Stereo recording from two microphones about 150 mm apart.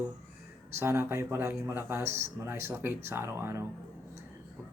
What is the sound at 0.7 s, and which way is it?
Speech, 20° right (ahead or behind).